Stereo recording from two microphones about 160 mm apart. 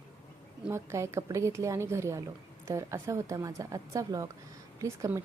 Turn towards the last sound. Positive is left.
turn(degrees=-20)  # may be behind; listen again after turning